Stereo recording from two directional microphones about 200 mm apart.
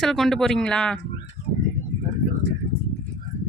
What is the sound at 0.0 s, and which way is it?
Speech, centre (ahead or behind).